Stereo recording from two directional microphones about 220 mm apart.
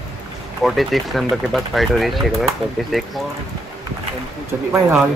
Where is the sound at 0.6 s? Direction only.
Centre (ahead or behind).